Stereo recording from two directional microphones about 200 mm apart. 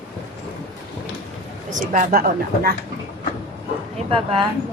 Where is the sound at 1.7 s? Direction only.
40° right (ahead or behind).